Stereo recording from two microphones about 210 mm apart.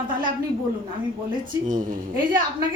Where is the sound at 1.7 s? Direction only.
40° right (ahead or behind).